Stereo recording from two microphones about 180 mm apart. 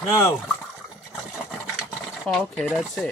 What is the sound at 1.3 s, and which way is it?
Sewing machine, 5° right (ahead or behind).